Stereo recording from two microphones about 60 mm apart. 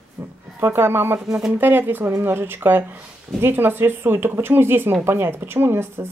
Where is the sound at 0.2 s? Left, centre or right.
Right.